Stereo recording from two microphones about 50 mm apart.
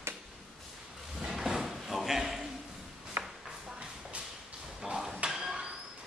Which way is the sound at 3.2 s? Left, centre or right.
Right.